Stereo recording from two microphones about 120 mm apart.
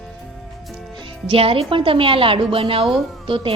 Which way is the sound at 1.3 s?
50° right (ahead or behind).